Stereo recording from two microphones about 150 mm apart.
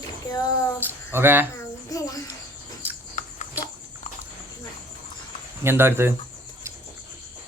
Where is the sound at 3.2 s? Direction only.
60° left (ahead or behind).